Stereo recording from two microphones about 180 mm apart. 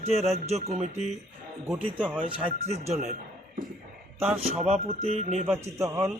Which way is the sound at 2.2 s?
35° right (ahead or behind).